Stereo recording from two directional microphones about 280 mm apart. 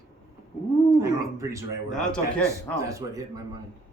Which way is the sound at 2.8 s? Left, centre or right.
Centre.